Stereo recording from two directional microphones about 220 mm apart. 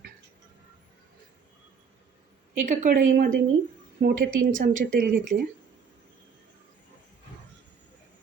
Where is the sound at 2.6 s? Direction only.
35° right (ahead or behind).